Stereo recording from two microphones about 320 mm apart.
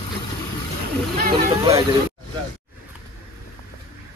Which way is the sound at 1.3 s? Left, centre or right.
Centre.